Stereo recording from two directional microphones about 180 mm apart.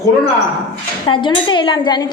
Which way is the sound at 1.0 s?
25° left (ahead or behind).